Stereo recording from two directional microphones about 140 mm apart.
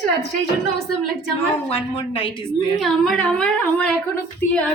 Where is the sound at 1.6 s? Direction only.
40° left (ahead or behind).